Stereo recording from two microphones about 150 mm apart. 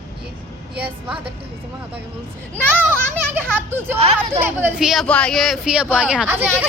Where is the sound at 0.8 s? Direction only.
10° right (ahead or behind).